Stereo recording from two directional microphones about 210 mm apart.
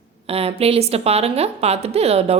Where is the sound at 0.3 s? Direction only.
30° right (ahead or behind).